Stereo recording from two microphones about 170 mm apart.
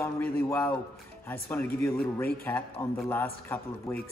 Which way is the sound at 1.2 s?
10° left (ahead or behind).